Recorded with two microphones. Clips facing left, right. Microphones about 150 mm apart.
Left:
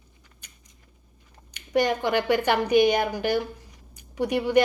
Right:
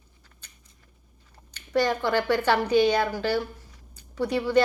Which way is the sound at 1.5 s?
15° left (ahead or behind).